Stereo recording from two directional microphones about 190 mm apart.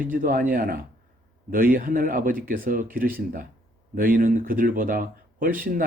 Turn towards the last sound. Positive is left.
turn(degrees=-45)  # may be behind; listen again after turning